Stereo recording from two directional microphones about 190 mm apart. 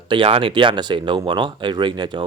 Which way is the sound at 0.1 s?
25° right (ahead or behind).